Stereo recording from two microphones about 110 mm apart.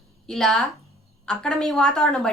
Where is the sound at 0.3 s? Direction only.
5° left (ahead or behind).